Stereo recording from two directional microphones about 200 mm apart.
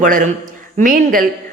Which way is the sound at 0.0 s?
40° right (ahead or behind).